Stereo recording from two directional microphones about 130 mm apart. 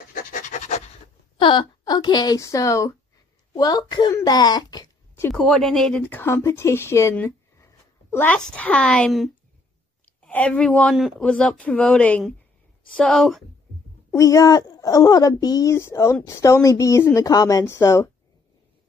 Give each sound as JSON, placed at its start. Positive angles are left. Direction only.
{"t": 0.1, "sound": "pant", "side_deg": 85}
{"t": 1.4, "sound": "a woman's voice", "side_deg": 35}
{"t": 5.3, "sound": "a woman's voice", "side_deg": 0}
{"t": 14.1, "sound": "speech", "side_deg": 25}